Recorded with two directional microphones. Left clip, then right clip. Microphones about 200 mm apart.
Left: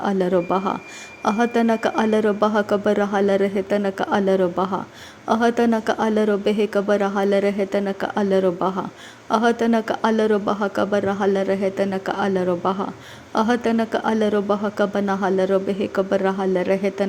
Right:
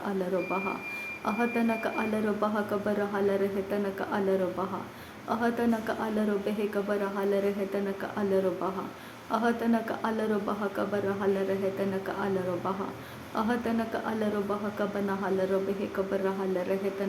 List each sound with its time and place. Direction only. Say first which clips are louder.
0.5 s speech: left 9 dB; 40° left (ahead or behind)